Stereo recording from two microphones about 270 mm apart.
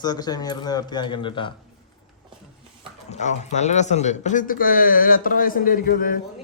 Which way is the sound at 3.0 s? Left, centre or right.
Left.